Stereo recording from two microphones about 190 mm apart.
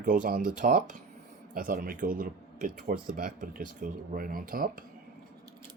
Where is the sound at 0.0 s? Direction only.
45° right (ahead or behind).